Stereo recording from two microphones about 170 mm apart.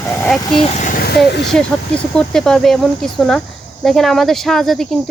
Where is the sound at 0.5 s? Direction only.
35° left (ahead or behind); by 1.5 s 80° left.